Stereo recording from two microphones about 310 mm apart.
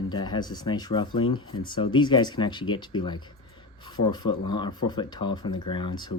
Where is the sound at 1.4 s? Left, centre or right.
Left.